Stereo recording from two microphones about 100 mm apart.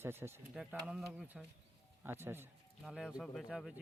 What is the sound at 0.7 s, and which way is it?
Speech, 10° right (ahead or behind).